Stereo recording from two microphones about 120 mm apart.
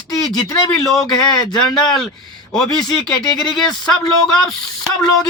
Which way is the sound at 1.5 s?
5° left (ahead or behind).